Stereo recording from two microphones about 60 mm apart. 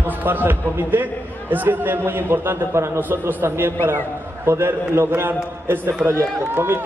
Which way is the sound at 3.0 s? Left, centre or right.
Right.